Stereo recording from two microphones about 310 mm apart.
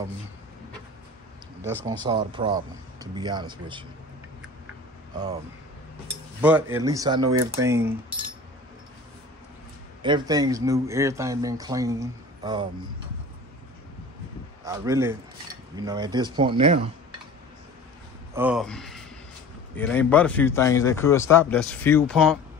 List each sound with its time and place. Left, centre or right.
1.9 s speech: centre
5.1 s speech: centre
6.4 s speech: centre
7.2 s speech: right
7.6 s speech: centre
10.0 s speech: centre
14.6 s speech: centre
18.3 s speech: centre